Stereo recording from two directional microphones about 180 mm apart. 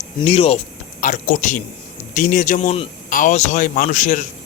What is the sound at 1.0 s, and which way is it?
Speech, 45° left (ahead or behind).